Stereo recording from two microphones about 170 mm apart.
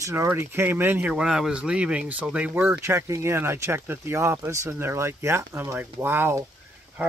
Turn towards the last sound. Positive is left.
turn(degrees=-15)  # may be behind; listen again after turning